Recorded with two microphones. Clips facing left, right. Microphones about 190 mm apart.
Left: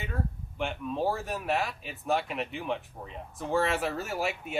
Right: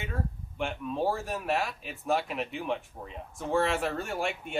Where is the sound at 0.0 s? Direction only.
Centre (ahead or behind).